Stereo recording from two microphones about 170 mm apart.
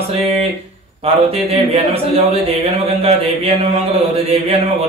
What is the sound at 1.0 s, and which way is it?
Speech, 35° right (ahead or behind).